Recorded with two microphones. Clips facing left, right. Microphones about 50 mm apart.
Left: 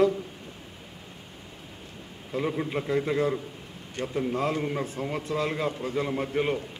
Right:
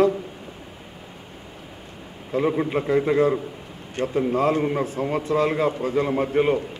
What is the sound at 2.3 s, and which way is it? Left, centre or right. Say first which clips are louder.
A man's voice: right 7 dB; centre.